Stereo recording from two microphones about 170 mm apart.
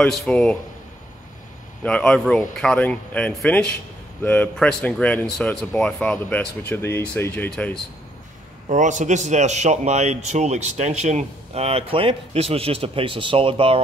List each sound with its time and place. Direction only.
0.0 s speech: 5° left (ahead or behind)
1.8 s speech: 5° left (ahead or behind)
8.6 s speech: 45° right (ahead or behind)